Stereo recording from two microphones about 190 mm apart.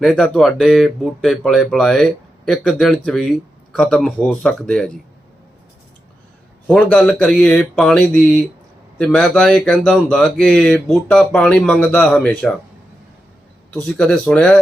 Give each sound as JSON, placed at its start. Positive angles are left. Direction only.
{"t": 0.0, "sound": "speech", "side_deg": 5}
{"t": 6.7, "sound": "speech", "side_deg": 5}
{"t": 13.7, "sound": "speech", "side_deg": 5}